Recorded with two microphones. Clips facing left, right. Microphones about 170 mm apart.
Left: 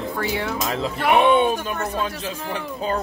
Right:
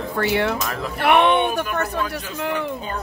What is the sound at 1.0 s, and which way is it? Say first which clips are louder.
Speech: even; 65° right (ahead or behind).